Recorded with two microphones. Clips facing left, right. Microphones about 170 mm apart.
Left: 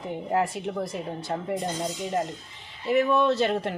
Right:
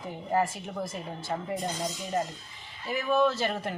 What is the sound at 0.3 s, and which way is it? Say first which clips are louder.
Speech: left 1 dB; 65° left (ahead or behind).